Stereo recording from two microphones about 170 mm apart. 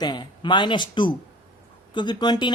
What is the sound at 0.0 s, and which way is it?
Speech, 25° left (ahead or behind).